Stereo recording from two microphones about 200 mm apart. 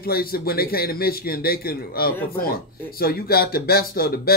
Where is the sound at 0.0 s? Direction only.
50° left (ahead or behind).